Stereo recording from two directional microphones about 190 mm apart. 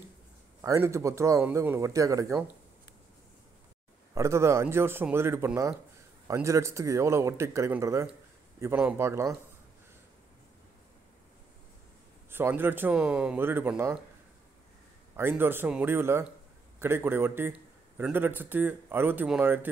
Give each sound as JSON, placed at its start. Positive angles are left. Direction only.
{"t": 0.6, "sound": "a man's voice", "side_deg": -15}
{"t": 4.1, "sound": "a man's voice", "side_deg": -15}
{"t": 12.3, "sound": "a man's voice", "side_deg": -10}
{"t": 15.1, "sound": "a man's voice", "side_deg": -10}